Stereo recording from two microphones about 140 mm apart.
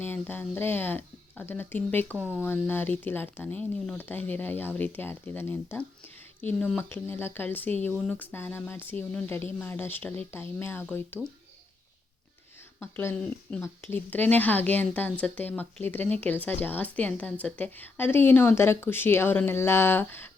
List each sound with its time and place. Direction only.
0.0 s a woman's voice: 15° left (ahead or behind)
12.8 s a woman's voice: 15° left (ahead or behind)